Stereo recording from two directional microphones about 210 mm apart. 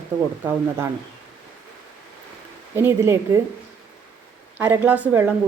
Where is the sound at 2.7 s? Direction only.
10° right (ahead or behind).